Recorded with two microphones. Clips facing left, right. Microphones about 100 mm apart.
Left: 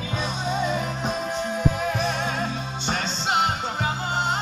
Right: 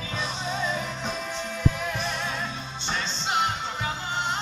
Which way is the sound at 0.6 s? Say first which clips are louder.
Left 4 dB; 45° left (ahead or behind).